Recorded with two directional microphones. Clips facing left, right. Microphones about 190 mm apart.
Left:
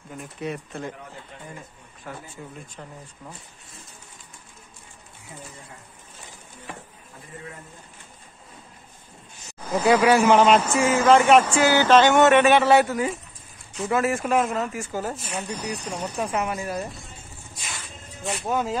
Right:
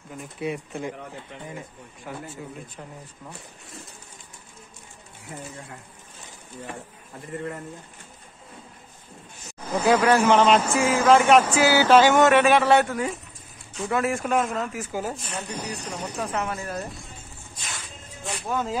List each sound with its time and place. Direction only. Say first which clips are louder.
0.1 s speech: right 1 dB; 5° right (ahead or behind)
2.0 s speech: right 2 dB; 10° right (ahead or behind)
9.8 s speech: left 1 dB; 10° left (ahead or behind); by 15.1 s 5° right (ahead or behind)
15.1 s speech: left 1 dB; 10° left (ahead or behind)
18.4 s speech: left 2 dB; 20° left (ahead or behind)